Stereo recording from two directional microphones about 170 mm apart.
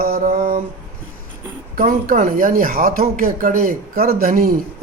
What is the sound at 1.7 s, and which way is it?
A man's voice, 55° right (ahead or behind).